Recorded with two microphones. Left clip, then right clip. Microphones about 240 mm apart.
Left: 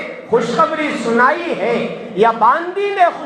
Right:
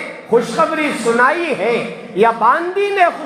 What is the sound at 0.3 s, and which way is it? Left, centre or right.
A man's voice, right.